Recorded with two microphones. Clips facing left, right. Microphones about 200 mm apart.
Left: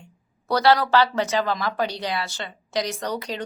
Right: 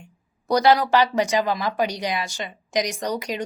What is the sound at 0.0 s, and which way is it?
A woman's voice, 15° right (ahead or behind).